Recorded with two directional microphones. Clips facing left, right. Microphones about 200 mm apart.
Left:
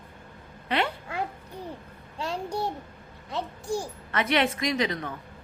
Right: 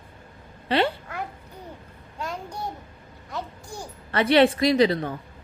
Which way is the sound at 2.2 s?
30° left (ahead or behind).